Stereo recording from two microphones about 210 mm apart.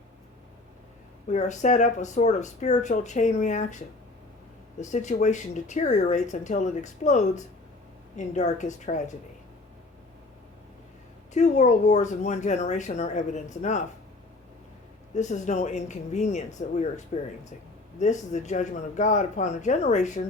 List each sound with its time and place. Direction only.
1.3 s speech: 35° left (ahead or behind)
11.3 s speech: 35° left (ahead or behind)
15.1 s speech: 35° left (ahead or behind)